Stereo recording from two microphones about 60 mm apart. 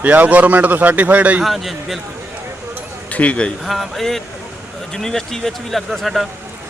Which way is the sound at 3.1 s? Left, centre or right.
Left.